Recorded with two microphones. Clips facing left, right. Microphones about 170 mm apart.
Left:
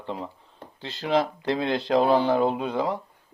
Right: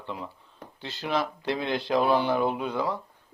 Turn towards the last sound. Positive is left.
turn(degrees=25)  # may be behind; listen again after turning